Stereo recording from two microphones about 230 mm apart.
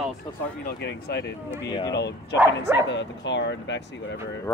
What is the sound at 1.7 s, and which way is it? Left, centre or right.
Speech, centre.